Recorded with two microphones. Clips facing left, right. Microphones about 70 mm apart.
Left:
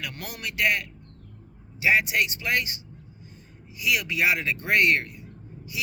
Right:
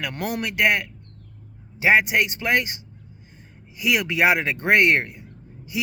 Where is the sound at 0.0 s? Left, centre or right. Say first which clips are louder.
Right 8 dB; right.